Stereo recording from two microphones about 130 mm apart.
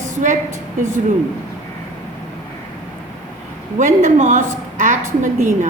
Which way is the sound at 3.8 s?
75° right (ahead or behind).